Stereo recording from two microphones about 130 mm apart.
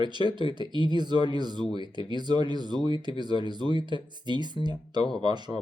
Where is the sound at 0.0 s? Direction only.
35° right (ahead or behind).